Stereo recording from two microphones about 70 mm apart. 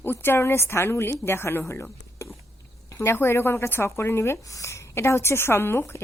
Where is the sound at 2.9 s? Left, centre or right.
Left.